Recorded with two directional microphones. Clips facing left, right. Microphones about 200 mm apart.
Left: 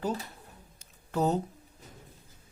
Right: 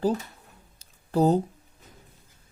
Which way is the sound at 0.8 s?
35° right (ahead or behind).